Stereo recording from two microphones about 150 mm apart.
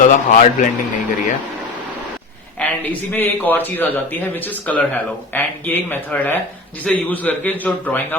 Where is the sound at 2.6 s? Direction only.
10° left (ahead or behind).